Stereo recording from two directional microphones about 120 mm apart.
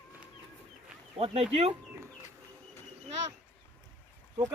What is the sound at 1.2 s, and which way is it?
Speech, 55° right (ahead or behind).